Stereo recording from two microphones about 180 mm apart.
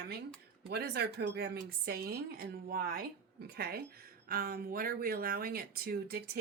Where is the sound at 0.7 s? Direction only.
60° right (ahead or behind).